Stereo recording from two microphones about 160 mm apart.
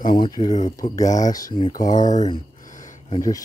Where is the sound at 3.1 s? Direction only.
20° left (ahead or behind).